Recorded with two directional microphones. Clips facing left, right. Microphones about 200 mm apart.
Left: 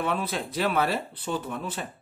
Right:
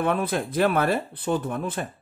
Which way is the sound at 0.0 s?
50° right (ahead or behind).